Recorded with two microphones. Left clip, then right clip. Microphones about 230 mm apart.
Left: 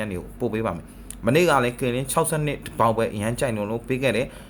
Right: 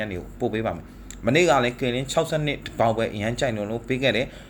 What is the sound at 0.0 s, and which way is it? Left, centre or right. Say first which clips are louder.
Speech: even; centre.